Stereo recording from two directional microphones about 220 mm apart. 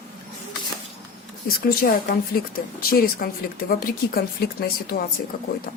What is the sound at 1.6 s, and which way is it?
A woman's voice, 45° left (ahead or behind).